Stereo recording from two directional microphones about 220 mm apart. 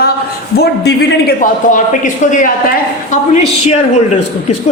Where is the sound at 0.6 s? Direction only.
45° left (ahead or behind).